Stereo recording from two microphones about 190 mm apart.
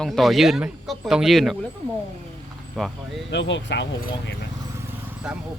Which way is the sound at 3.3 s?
70° left (ahead or behind).